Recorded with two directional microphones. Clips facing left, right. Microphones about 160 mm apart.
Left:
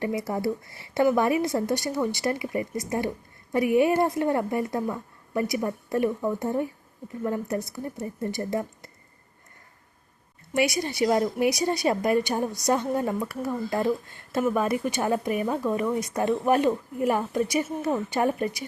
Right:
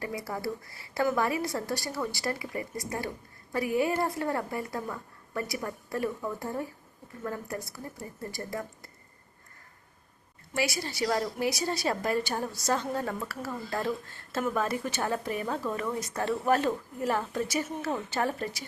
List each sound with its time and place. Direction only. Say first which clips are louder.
0.0 s a woman's voice: left 7 dB; 25° left (ahead or behind)
10.5 s a woman's voice: left 6 dB; 20° left (ahead or behind)